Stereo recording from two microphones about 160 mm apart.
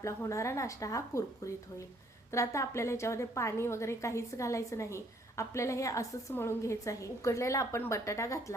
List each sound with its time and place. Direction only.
0.0 s a woman's voice: 20° left (ahead or behind)